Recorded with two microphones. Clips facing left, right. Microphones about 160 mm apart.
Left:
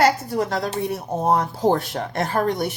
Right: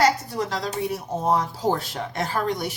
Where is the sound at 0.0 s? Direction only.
55° left (ahead or behind).